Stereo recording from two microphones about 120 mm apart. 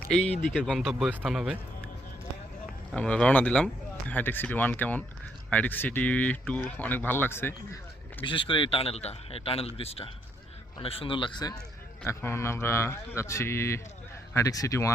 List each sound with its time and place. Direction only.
0.0 s speech: 5° left (ahead or behind)
2.9 s speech: 10° left (ahead or behind)
8.2 s speech: 45° left (ahead or behind)
12.0 s speech: 20° left (ahead or behind)